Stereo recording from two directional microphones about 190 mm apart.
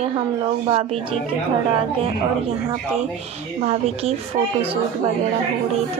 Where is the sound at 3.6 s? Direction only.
35° right (ahead or behind).